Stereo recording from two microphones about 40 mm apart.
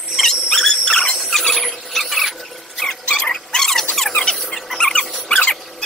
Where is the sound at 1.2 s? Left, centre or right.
Centre.